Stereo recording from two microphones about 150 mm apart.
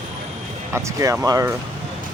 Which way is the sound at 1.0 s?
20° right (ahead or behind).